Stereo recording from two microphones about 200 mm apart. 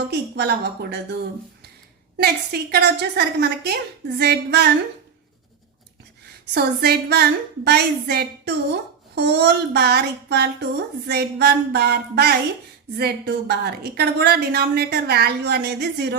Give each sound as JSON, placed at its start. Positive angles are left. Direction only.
{"t": 0.1, "sound": "a woman's voice", "side_deg": -55}
{"t": 2.1, "sound": "a woman's voice", "side_deg": -55}
{"t": 6.5, "sound": "a woman's voice", "side_deg": -50}